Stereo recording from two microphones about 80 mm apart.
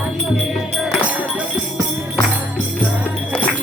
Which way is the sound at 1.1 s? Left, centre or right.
Centre.